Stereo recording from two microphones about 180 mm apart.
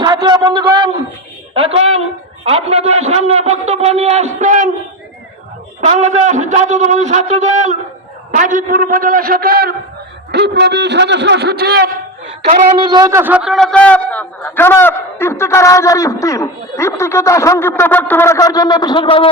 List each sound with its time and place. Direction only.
0.0 s a man's voice: 20° right (ahead or behind); by 4.7 s 45° right (ahead or behind)
5.8 s a man's voice: 40° right (ahead or behind); by 9.7 s 60° right (ahead or behind)
10.3 s a man's voice: 70° right (ahead or behind)
12.8 s speech: 25° right (ahead or behind); by 19.3 s 30° left (ahead or behind)